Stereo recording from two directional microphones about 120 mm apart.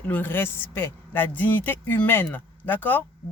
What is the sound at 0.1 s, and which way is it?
Speech, 15° left (ahead or behind).